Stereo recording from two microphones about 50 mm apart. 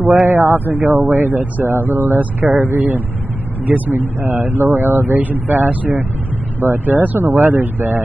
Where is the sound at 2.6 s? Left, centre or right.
Right.